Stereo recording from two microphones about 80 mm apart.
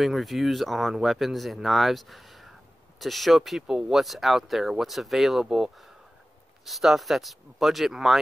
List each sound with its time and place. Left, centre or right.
0.0 s speech: centre